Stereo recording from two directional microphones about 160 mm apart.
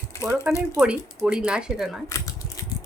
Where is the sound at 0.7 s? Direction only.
5° right (ahead or behind).